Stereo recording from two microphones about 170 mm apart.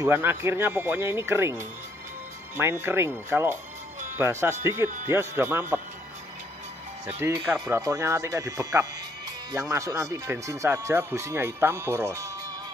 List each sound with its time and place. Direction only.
0.0 s speech: 15° right (ahead or behind)
2.8 s speech: 15° right (ahead or behind)
7.1 s speech: 15° right (ahead or behind)